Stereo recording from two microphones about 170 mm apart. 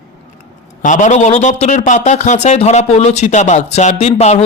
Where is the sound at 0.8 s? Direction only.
50° left (ahead or behind).